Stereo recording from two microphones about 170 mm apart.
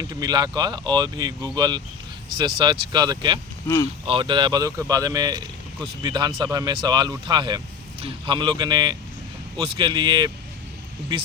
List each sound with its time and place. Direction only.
0.0 s speech: 20° right (ahead or behind)